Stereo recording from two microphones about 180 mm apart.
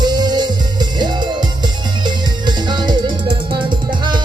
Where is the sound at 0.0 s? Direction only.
25° right (ahead or behind).